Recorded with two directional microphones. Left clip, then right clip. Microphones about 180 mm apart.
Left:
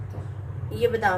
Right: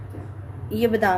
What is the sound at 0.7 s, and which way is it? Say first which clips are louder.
Speech: right 2 dB; 65° right (ahead or behind).